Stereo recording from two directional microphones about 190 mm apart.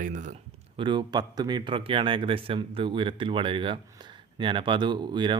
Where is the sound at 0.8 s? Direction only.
25° right (ahead or behind).